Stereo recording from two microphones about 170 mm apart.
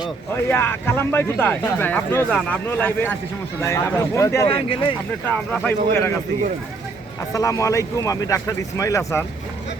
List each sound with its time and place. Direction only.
0.4 s speech: 15° left (ahead or behind)
4.4 s speech: 35° left (ahead or behind)
5.3 s speech: 10° left (ahead or behind)
7.3 s a man's voice: 20° left (ahead or behind)